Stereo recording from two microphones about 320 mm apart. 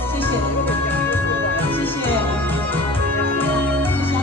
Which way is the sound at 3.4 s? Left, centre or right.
Centre.